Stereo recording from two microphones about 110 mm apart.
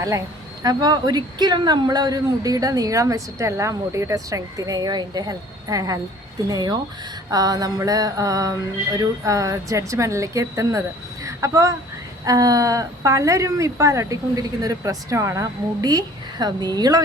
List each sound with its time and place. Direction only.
0.6 s speech: 35° right (ahead or behind)
7.3 s music: 35° right (ahead or behind)
12.2 s speech: 35° right (ahead or behind)